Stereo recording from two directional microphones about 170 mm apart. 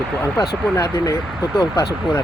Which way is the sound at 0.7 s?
15° left (ahead or behind).